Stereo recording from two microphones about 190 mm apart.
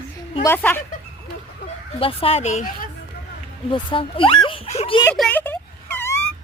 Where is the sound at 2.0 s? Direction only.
30° left (ahead or behind).